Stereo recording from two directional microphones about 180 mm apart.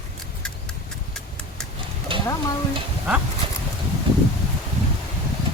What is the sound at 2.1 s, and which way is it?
Stir, 30° right (ahead or behind).